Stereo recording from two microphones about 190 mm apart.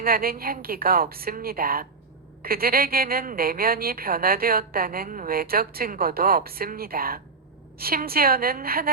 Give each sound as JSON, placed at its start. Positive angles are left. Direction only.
{"t": 0.0, "sound": "a woman's voice", "side_deg": -50}